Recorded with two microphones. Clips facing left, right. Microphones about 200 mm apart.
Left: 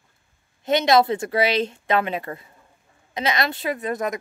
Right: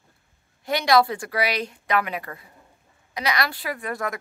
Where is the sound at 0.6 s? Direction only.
20° left (ahead or behind).